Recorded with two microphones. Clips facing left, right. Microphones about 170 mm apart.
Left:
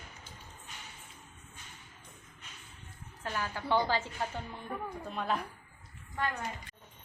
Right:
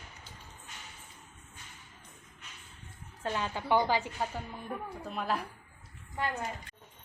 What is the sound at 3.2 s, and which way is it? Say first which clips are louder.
A woman's voice: right 3 dB; 20° right (ahead or behind).